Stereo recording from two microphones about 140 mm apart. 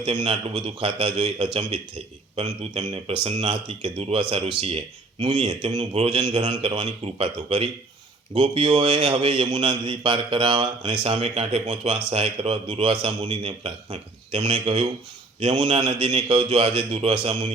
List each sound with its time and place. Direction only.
0.0 s a man's voice: 45° right (ahead or behind)